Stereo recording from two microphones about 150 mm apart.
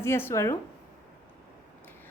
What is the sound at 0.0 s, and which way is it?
Speech, 15° left (ahead or behind).